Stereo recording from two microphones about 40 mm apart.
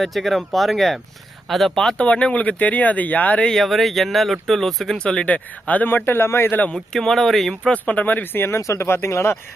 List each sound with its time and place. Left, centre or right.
0.0 s speech: centre
2.0 s speech: left
3.5 s speech: centre
4.9 s speech: left
5.2 s speech: left
5.9 s speech: left
6.7 s speech: centre
7.7 s speech: left
8.0 s speech: left